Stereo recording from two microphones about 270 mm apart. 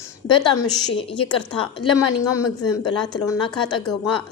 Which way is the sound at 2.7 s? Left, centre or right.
Centre.